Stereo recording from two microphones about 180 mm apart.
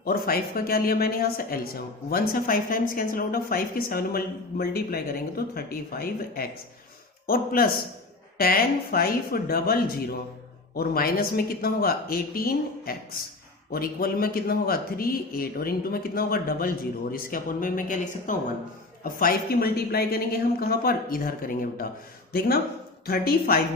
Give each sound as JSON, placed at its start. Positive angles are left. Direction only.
{"t": 0.0, "sound": "speech", "side_deg": 55}